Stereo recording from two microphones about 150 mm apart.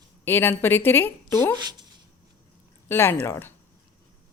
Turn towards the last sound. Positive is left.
turn(degrees=15)  # may be behind; listen again after turning